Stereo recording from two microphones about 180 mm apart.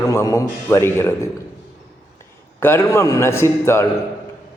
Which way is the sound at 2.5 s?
15° left (ahead or behind).